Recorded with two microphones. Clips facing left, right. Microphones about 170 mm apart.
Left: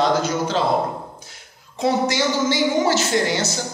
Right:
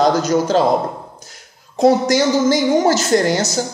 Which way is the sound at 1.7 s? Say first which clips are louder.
Right 7 dB; 40° right (ahead or behind).